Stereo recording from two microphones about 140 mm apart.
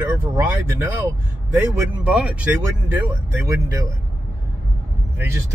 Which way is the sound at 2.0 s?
10° right (ahead or behind).